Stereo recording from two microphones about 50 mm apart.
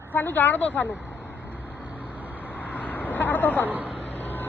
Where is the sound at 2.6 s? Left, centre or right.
Left.